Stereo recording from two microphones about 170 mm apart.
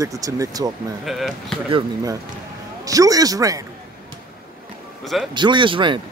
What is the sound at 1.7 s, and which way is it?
Speech, 20° right (ahead or behind).